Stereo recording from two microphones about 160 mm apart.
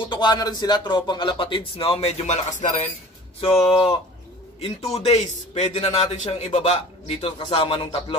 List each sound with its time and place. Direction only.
0.0 s a man's voice: 30° left (ahead or behind)